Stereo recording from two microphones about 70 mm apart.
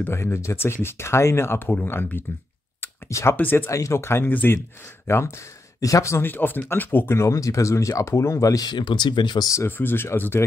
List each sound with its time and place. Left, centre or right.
0.1 s speech: left
3.1 s speech: left
3.3 s speech: left
3.7 s speech: left
5.0 s speech: left
5.8 s speech: left
6.2 s speech: left
7.2 s speech: left
8.6 s speech: left
9.7 s speech: left